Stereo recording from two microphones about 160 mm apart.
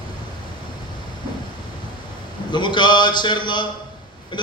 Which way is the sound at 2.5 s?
30° left (ahead or behind).